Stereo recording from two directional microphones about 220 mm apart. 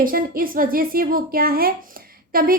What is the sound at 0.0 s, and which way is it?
Speech, 40° right (ahead or behind).